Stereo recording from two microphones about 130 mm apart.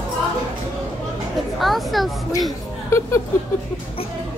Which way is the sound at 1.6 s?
Centre (ahead or behind).